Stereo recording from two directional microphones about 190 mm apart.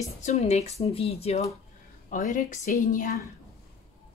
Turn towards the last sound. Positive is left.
turn(degrees=45)  # may be behind; listen again after turning